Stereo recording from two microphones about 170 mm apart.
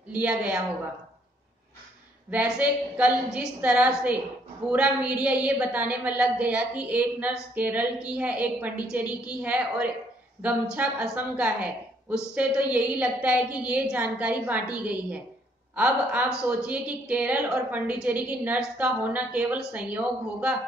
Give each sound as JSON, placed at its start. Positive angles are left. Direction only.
{"t": 0.1, "sound": "a woman's voice", "side_deg": -5}
{"t": 2.3, "sound": "a woman's voice", "side_deg": -5}